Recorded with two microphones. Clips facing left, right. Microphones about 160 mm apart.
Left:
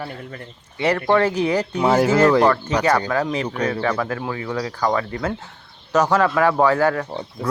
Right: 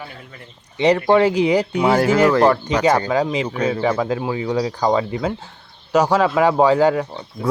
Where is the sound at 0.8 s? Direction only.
20° right (ahead or behind).